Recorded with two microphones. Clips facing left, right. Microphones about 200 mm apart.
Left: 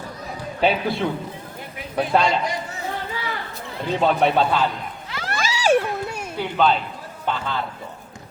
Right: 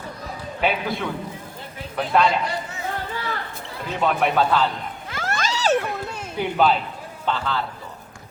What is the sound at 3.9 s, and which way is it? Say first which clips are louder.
Speech: left 3 dB; 30° left (ahead or behind).